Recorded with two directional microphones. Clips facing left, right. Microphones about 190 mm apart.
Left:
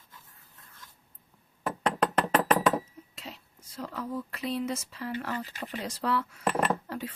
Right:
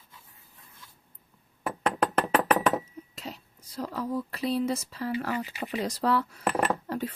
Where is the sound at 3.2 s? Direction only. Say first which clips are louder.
Right 4 dB; 40° right (ahead or behind).